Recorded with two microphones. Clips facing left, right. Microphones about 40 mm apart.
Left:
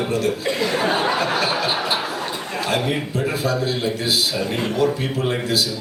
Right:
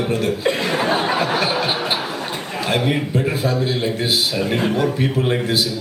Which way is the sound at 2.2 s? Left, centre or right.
Centre.